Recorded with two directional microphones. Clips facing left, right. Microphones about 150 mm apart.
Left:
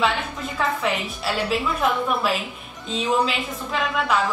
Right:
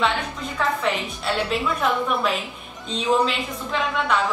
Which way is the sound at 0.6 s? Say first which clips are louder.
Even; centre (ahead or behind).